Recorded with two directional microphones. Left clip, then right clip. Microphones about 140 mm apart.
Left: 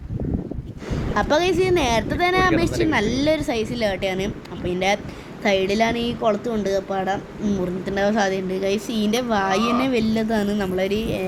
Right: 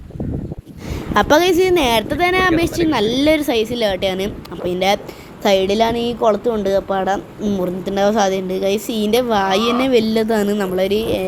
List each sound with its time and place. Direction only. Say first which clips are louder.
1.1 s a woman's voice: right 6 dB; 40° right (ahead or behind)
6.5 s a woman's voice: right 6 dB; 15° right (ahead or behind)